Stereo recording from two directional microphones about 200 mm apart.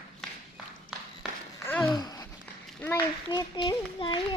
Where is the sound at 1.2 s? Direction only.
5° right (ahead or behind).